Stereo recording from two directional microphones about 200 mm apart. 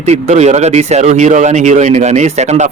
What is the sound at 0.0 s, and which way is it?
Speech, 35° right (ahead or behind).